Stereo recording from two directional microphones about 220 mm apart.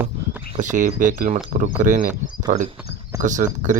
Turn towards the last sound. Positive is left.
turn(degrees=-35)  # may be behind; listen again after turning